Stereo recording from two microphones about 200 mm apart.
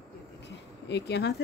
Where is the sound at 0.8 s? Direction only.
55° left (ahead or behind).